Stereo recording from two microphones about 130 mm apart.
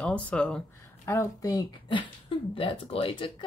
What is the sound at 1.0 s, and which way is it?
Speech, 25° left (ahead or behind).